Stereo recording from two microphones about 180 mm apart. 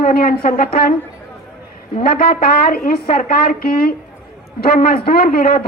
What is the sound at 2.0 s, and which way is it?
A man's voice, 55° left (ahead or behind).